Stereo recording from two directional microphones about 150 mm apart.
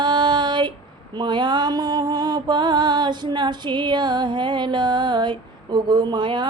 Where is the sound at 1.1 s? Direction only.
30° right (ahead or behind).